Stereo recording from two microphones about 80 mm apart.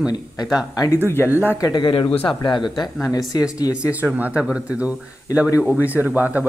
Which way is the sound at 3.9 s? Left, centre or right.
Right.